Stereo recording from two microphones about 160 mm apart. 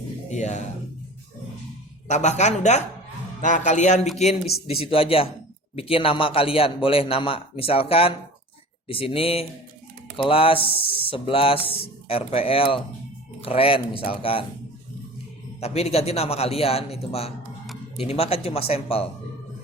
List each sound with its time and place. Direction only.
0.3 s a woman's voice: 45° left (ahead or behind)
2.0 s a woman's voice: 45° left (ahead or behind)
15.6 s speech: 40° left (ahead or behind)